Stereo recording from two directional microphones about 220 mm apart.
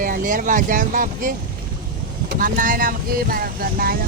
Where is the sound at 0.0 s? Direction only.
35° right (ahead or behind).